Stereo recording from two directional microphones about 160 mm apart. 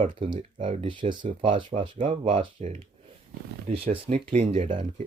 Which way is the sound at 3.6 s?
35° right (ahead or behind).